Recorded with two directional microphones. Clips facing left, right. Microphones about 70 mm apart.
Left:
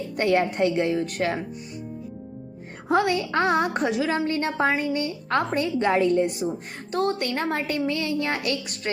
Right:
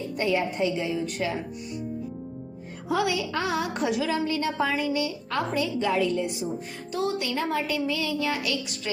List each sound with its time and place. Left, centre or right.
0.2 s speech: left
2.9 s speech: left